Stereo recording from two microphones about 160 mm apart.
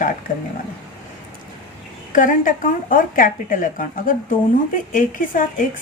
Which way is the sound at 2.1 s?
55° left (ahead or behind).